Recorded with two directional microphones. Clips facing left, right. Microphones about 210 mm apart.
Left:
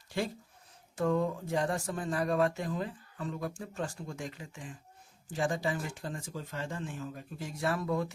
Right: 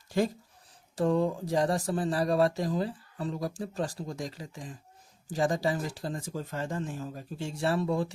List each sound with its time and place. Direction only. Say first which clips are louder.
0.1 s speech: right 6 dB; 40° right (ahead or behind)